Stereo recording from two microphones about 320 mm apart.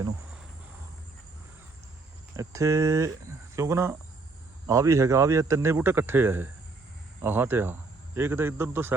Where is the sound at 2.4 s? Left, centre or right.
Centre.